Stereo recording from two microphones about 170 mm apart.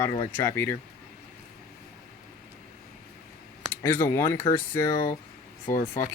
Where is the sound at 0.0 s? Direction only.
15° left (ahead or behind).